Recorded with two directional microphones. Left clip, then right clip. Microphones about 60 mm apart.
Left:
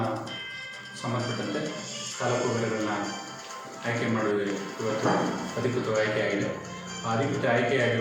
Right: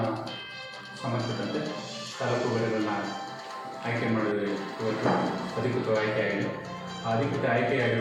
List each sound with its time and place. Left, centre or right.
1.2 s music: right
3.9 s speech: right